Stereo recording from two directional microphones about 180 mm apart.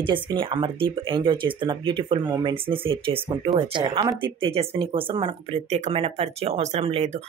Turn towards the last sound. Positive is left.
turn(degrees=-35)  # may be behind; listen again after turning